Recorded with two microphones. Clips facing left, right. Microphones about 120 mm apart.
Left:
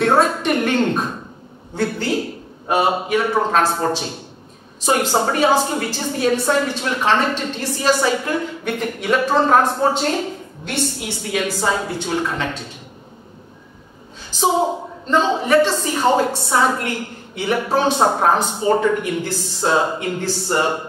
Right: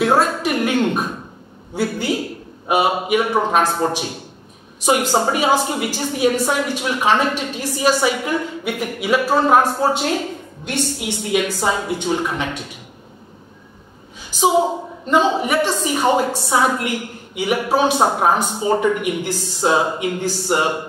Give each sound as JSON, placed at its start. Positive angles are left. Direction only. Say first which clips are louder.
{"t": 0.0, "sound": "a sound", "louder": "even", "side_deg": -5}
{"t": 1.8, "sound": "a woman's voice", "louder": "even", "side_deg": -15}
{"t": 14.3, "sound": "a woman's voice", "louder": "right 2 dB", "side_deg": -10}